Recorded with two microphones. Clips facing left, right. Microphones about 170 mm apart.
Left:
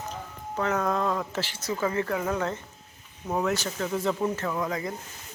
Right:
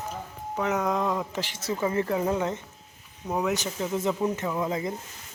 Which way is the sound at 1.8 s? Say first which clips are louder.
Right 2 dB; 25° right (ahead or behind).